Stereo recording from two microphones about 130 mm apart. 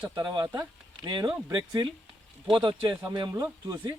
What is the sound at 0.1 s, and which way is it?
Speech, 35° right (ahead or behind).